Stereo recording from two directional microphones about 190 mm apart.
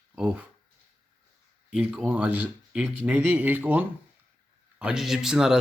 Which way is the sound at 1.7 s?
5° right (ahead or behind).